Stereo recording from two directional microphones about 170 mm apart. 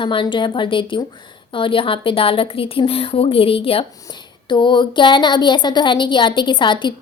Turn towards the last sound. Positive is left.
turn(degrees=30)  # may be behind; listen again after turning